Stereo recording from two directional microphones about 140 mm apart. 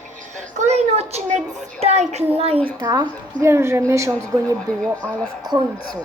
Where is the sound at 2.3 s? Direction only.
45° right (ahead or behind).